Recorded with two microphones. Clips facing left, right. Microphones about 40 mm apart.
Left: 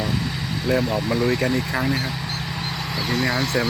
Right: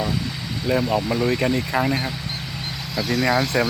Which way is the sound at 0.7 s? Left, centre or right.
Centre.